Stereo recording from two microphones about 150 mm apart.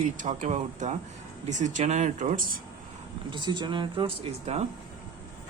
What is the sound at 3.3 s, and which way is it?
Speech, 30° right (ahead or behind).